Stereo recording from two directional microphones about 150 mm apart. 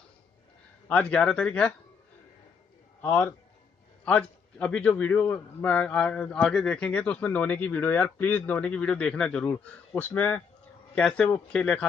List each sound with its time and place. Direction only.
0.8 s a man's voice: 10° left (ahead or behind)
3.0 s a man's voice: 15° left (ahead or behind)